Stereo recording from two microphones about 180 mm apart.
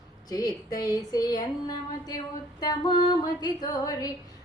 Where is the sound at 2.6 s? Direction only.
20° left (ahead or behind).